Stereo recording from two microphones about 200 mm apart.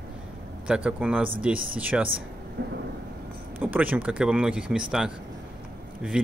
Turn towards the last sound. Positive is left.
turn(degrees=-5)  # may be behind; listen again after turning